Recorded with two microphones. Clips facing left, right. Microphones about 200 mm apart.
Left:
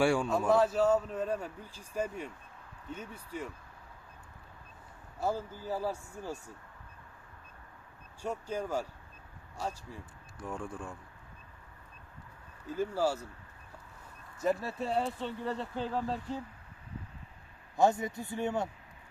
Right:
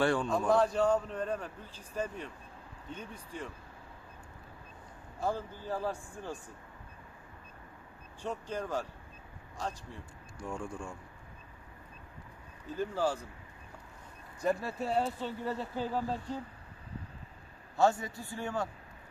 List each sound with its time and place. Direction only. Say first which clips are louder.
0.0 s a man's voice: left 1 dB; 10° left (ahead or behind)
5.2 s a man's voice: left 1 dB; 10° left (ahead or behind)
8.2 s a man's voice: left 1 dB; 10° left (ahead or behind)
12.6 s a man's voice: left 1 dB; 10° left (ahead or behind)
14.4 s speech: even; centre (ahead or behind)
17.7 s a man's voice: left 1 dB; 20° left (ahead or behind)